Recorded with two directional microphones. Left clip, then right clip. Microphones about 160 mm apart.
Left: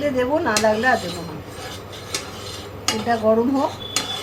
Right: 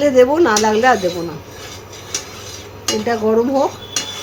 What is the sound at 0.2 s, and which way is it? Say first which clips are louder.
Speech: right 7 dB; 90° right.